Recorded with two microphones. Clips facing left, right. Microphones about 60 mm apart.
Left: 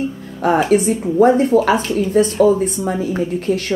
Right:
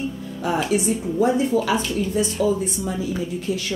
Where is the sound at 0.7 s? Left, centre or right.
Left.